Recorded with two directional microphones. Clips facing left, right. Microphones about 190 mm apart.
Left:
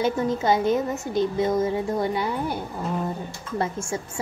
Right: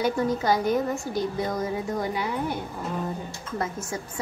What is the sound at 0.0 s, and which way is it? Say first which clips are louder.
A child's voice: left 1 dB; 25° left (ahead or behind).